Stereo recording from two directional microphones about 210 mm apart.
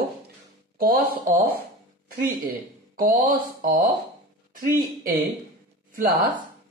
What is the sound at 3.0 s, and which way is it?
Speech, 45° right (ahead or behind).